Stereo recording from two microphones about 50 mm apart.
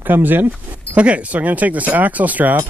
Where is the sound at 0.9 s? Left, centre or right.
Right.